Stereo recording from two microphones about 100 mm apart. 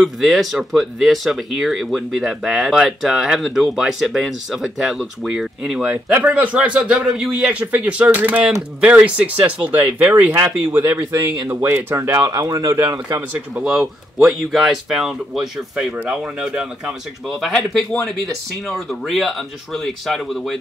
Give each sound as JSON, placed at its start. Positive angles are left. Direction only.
{"t": 0.0, "sound": "speech", "side_deg": 0}
{"t": 12.2, "sound": "speech", "side_deg": -40}
{"t": 13.6, "sound": "speech", "side_deg": -5}
{"t": 17.4, "sound": "speech", "side_deg": 5}
{"t": 18.9, "sound": "speech", "side_deg": 0}